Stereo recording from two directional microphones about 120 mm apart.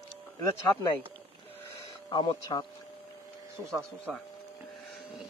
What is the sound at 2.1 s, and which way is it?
Speech, 35° left (ahead or behind).